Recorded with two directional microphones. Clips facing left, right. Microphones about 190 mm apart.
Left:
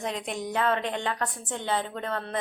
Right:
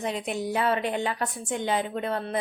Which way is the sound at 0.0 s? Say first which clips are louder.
Right 3 dB; 5° right (ahead or behind).